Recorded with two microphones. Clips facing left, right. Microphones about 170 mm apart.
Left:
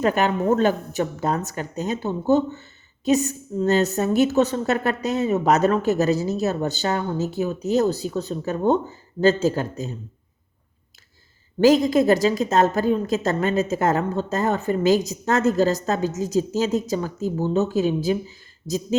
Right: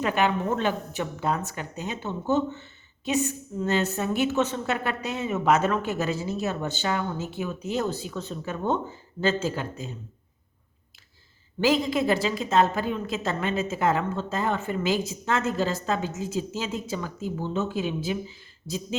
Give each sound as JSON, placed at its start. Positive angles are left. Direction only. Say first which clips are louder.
{"t": 0.0, "sound": "a woman's voice", "louder": "left 4 dB", "side_deg": 40}
{"t": 11.6, "sound": "a woman's voice", "louder": "left 7 dB", "side_deg": 40}